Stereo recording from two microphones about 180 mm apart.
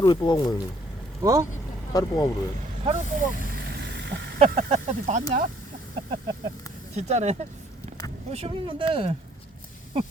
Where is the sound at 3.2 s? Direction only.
55° right (ahead or behind); by 4.4 s 70° right (ahead or behind).